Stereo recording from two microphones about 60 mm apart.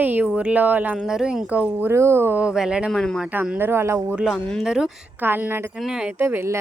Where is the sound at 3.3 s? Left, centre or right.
Right.